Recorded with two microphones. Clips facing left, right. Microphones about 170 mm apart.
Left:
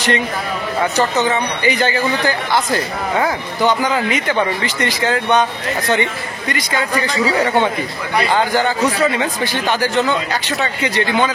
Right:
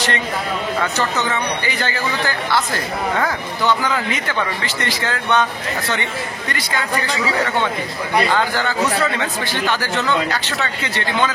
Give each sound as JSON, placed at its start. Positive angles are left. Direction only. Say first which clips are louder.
{"t": 0.9, "sound": "speech", "louder": "left 5 dB", "side_deg": 15}
{"t": 8.4, "sound": "speech", "louder": "left 3 dB", "side_deg": 15}